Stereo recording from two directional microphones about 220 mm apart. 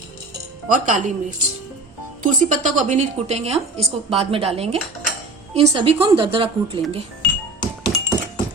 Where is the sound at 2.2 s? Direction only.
35° right (ahead or behind).